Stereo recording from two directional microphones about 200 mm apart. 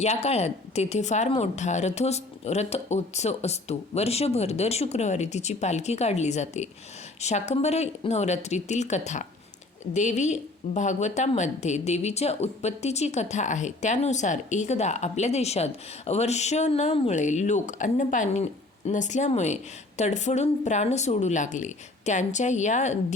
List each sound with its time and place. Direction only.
0.0 s speech: 30° left (ahead or behind)